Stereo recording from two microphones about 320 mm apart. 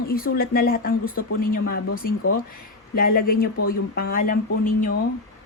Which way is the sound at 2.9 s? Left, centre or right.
Left.